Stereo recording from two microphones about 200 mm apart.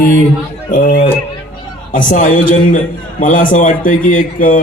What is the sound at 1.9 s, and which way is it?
A man's voice, 40° left (ahead or behind).